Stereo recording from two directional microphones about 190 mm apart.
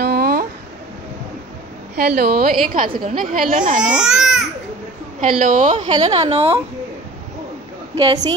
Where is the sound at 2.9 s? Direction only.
25° right (ahead or behind).